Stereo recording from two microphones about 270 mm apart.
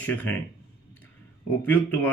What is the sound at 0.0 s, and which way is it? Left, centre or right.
Speech, centre.